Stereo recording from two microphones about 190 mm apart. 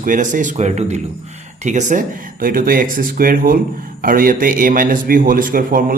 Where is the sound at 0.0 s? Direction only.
45° right (ahead or behind).